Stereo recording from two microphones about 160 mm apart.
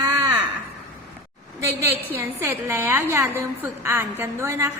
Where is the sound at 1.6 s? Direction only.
20° right (ahead or behind).